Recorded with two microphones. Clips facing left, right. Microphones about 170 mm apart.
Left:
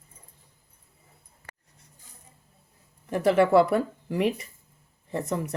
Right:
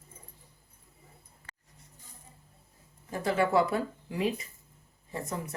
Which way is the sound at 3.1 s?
75° left (ahead or behind).